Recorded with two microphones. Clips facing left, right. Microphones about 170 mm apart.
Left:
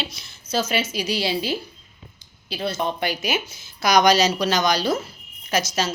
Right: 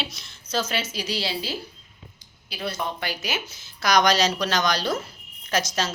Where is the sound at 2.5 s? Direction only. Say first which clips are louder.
Left 5 dB; 25° left (ahead or behind).